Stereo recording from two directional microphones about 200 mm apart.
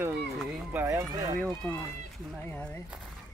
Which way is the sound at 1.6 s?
10° left (ahead or behind).